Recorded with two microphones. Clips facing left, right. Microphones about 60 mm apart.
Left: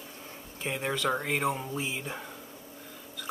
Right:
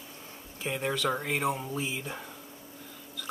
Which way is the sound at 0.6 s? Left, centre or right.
Centre.